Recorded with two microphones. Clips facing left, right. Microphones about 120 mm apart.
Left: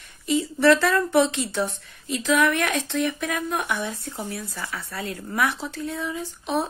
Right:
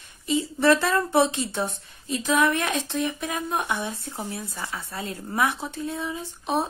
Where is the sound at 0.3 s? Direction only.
25° right (ahead or behind).